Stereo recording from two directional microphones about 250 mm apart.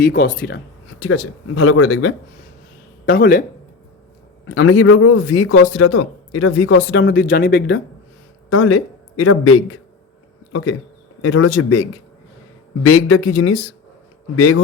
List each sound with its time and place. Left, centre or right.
0.0 s speech: left
1.0 s a man's voice: left
3.1 s speech: left
4.4 s a man's voice: left
8.4 s a man's voice: left
12.8 s a man's voice: left